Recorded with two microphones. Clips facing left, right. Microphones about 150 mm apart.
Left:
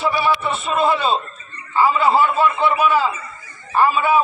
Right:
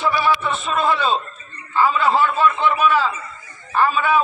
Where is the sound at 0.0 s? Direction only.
5° left (ahead or behind).